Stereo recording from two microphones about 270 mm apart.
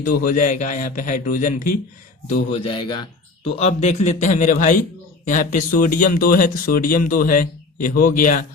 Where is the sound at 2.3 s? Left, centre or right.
Centre.